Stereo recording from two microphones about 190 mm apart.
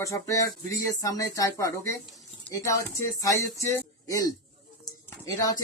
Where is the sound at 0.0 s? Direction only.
15° left (ahead or behind).